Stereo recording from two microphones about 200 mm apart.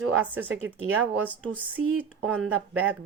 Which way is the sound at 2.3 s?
5° right (ahead or behind).